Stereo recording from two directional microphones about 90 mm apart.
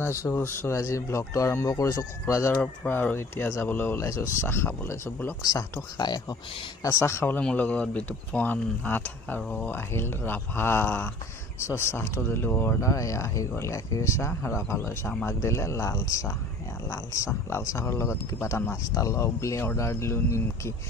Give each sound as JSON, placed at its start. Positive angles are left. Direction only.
{"t": 0.0, "sound": "speech", "side_deg": 30}
{"t": 2.5, "sound": "speech", "side_deg": 15}
{"t": 2.9, "sound": "speech", "side_deg": 25}
{"t": 4.0, "sound": "speech", "side_deg": 35}
{"t": 5.4, "sound": "speech", "side_deg": 45}
{"t": 6.8, "sound": "speech", "side_deg": 35}
{"t": 7.3, "sound": "speech", "side_deg": 15}
{"t": 12.8, "sound": "speech", "side_deg": 35}